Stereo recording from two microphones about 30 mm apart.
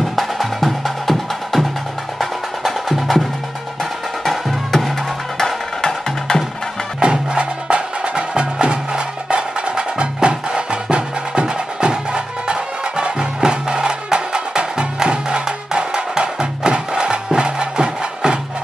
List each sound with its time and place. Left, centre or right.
0.1 s music: centre
5.4 s music: left
7.0 s music: right